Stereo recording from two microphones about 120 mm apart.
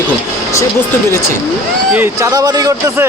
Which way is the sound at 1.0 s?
20° left (ahead or behind).